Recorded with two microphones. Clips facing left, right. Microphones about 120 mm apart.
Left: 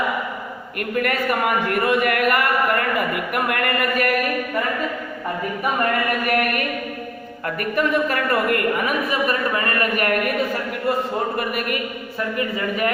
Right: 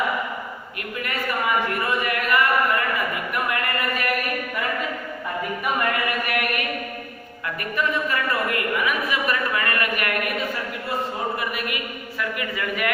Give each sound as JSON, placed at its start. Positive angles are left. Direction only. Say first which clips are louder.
{"t": 0.9, "sound": "speech", "louder": "left 6 dB", "side_deg": 55}
{"t": 3.3, "sound": "a sound", "louder": "left 4 dB", "side_deg": 55}
{"t": 5.8, "sound": "chant", "louder": "left 4 dB", "side_deg": 40}
{"t": 7.4, "sound": "a woman's voice", "louder": "left 4 dB", "side_deg": 50}
{"t": 12.4, "sound": "a man's voice", "louder": "left 6 dB", "side_deg": 35}